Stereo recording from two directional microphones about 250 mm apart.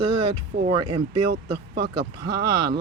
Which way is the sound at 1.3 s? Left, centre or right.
Right.